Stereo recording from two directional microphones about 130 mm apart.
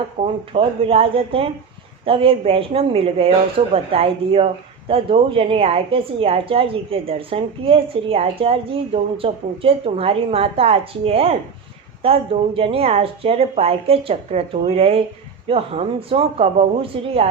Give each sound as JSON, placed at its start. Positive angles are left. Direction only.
{"t": 0.2, "sound": "a woman's voice", "side_deg": -55}